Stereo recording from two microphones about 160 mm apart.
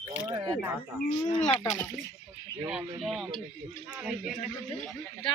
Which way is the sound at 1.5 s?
35° left (ahead or behind).